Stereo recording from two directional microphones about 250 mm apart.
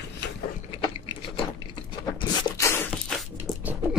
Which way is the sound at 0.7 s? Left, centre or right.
Left.